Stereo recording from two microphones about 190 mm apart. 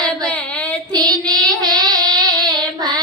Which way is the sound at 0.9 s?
20° right (ahead or behind).